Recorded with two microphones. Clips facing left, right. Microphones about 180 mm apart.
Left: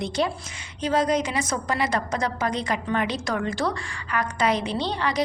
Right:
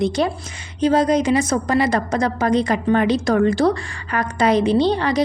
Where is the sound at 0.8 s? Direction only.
35° right (ahead or behind).